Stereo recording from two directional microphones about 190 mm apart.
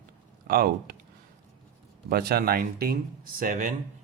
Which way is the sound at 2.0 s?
55° right (ahead or behind).